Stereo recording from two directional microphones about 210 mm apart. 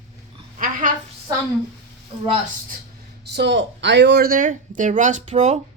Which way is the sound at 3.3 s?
55° right (ahead or behind).